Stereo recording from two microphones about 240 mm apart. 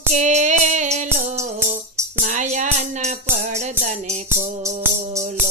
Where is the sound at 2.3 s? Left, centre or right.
Right.